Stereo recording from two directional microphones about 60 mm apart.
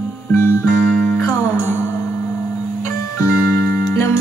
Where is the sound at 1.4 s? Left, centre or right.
Left.